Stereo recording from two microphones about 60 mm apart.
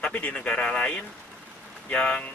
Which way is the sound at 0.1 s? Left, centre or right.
Left.